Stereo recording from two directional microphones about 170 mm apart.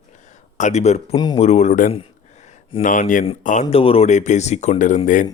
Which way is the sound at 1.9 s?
40° left (ahead or behind).